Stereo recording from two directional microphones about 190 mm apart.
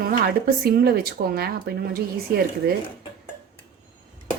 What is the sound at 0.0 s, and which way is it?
Speech, 50° right (ahead or behind).